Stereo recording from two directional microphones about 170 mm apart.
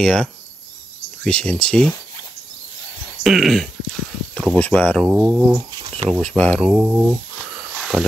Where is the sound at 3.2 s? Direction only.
Centre (ahead or behind).